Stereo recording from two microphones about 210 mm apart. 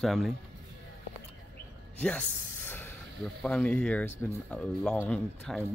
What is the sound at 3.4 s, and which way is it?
Speech, 5° left (ahead or behind).